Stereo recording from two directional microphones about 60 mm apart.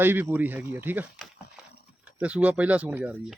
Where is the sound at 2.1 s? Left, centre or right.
Right.